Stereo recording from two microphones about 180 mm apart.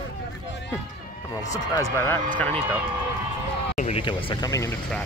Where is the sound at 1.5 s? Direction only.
15° left (ahead or behind).